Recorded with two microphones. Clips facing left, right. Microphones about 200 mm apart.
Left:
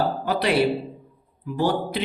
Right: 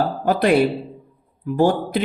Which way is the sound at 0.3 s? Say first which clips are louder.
Right 8 dB; 50° right (ahead or behind).